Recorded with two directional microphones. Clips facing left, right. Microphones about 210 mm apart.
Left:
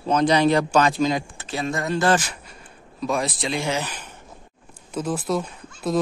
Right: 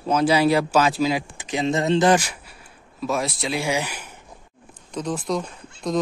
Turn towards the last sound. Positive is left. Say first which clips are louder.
# left 1 dB
turn(degrees=5)  # may be behind; listen again after turning